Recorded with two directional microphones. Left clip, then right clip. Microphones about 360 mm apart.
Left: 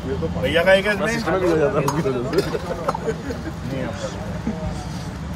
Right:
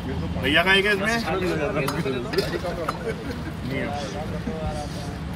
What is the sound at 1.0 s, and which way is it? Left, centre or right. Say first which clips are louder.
Speech: left 4 dB; left.